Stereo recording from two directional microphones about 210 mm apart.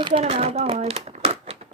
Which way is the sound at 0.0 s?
25° right (ahead or behind).